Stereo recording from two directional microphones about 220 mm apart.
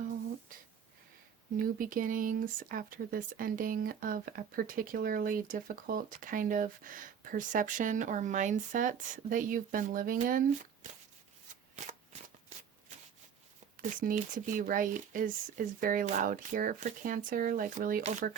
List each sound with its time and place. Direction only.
1.5 s speech: 40° right (ahead or behind)
13.7 s speech: 40° right (ahead or behind)